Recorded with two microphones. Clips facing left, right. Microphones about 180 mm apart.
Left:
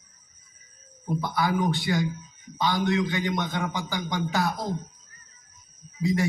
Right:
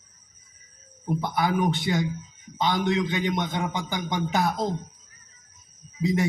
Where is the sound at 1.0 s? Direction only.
20° right (ahead or behind).